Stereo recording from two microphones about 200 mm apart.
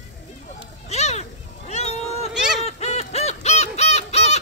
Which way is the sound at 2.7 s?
35° left (ahead or behind).